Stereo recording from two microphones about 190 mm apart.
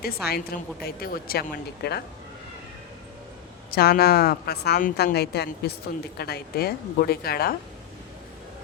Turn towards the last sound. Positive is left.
turn(degrees=55)  # may be behind; listen again after turning